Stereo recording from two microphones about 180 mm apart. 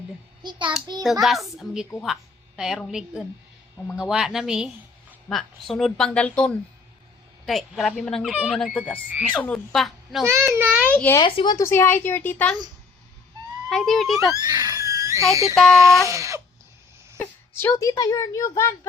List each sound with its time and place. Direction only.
0.4 s child singing: 25° right (ahead or behind)
1.2 s speech: centre (ahead or behind)
10.2 s a child's voice: 15° right (ahead or behind)
10.8 s a child's voice: 10° left (ahead or behind)
11.2 s speech: 25° left (ahead or behind)
13.7 s speech: centre (ahead or behind)
14.3 s a child's voice: 20° right (ahead or behind)
17.2 s speech: 15° left (ahead or behind)